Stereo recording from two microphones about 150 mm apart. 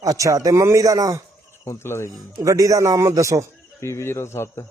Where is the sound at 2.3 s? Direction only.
20° right (ahead or behind).